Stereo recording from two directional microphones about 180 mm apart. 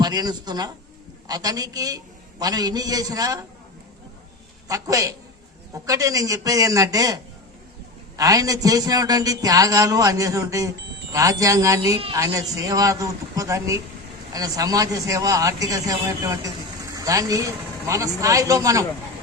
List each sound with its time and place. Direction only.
0.0 s a man's voice: 20° right (ahead or behind)
4.7 s a man's voice: 20° right (ahead or behind)